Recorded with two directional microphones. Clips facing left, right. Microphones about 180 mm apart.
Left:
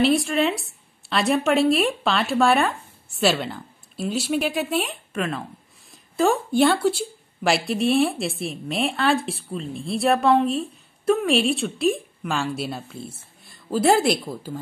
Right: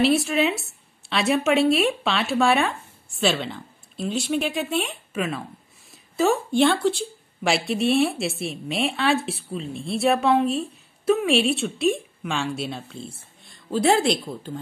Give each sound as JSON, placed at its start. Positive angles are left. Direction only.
{"t": 0.0, "sound": "a woman's voice", "side_deg": -5}